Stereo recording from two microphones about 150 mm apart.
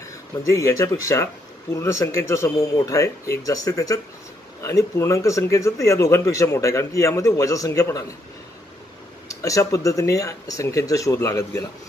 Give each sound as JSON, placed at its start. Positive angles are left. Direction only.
{"t": 0.4, "sound": "speech", "side_deg": 20}
{"t": 9.3, "sound": "speech", "side_deg": 20}